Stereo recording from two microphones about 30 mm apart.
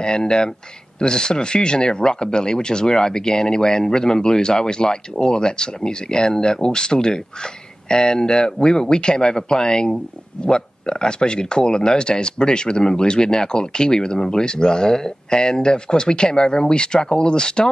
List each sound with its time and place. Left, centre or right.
0.0 s speech: left